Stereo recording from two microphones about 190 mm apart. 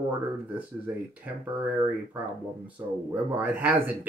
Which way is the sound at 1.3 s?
10° right (ahead or behind).